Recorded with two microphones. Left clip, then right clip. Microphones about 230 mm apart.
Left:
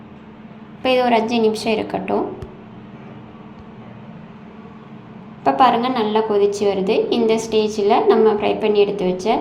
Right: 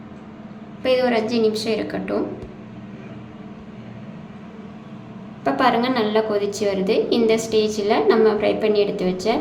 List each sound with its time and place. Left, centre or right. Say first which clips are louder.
0.8 s a woman's voice: left 3 dB; centre
5.4 s a woman's voice: left 4 dB; centre